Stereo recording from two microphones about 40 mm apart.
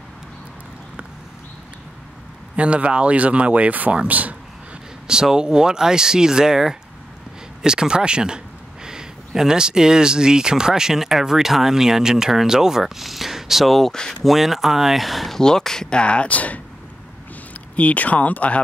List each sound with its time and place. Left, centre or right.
2.5 s speech: right
5.0 s speech: centre
15.3 s speech: centre
16.0 s speech: left
16.3 s speech: left
17.7 s speech: left